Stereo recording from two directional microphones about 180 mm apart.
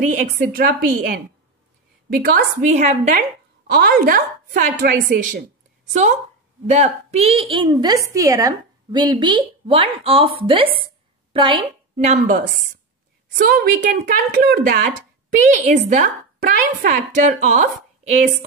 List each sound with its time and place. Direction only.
0.1 s a woman's voice: 45° right (ahead or behind)
2.7 s a woman's voice: 40° right (ahead or behind)
3.7 s speech: 60° right (ahead or behind)
6.7 s a woman's voice: 40° right (ahead or behind)
13.4 s a woman's voice: 55° right (ahead or behind)
15.2 s speech: 40° right (ahead or behind)